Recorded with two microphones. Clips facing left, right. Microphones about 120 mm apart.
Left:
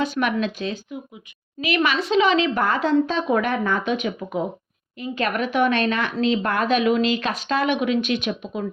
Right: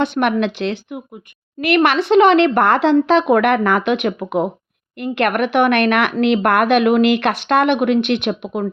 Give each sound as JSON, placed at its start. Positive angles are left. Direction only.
{"t": 0.0, "sound": "speech", "side_deg": -60}